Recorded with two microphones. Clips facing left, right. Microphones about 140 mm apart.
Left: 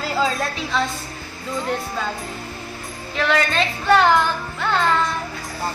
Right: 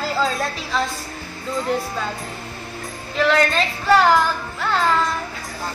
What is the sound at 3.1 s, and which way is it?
A woman's voice, centre (ahead or behind).